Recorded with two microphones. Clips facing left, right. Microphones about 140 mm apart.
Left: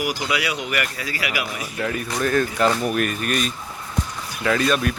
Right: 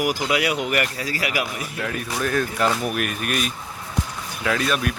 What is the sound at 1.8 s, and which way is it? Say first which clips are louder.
Speech: left 3 dB; centre (ahead or behind).